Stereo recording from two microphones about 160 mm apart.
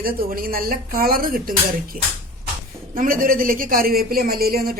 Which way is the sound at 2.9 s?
60° right (ahead or behind).